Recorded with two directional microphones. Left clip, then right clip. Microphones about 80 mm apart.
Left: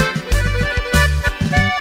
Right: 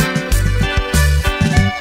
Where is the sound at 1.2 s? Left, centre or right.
Right.